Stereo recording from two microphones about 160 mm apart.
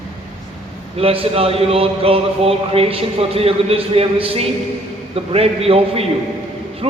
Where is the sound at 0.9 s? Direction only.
35° right (ahead or behind).